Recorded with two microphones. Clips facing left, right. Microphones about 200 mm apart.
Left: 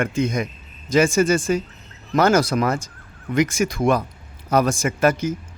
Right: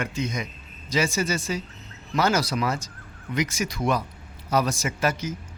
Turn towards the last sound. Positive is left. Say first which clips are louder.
# left 7 dB
turn(degrees=55)  # may be behind; listen again after turning